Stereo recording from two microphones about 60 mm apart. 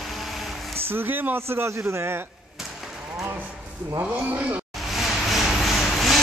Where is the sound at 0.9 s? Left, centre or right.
Right.